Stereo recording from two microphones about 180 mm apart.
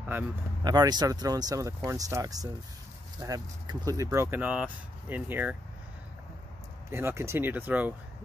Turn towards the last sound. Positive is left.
turn(degrees=-10)  # may be behind; listen again after turning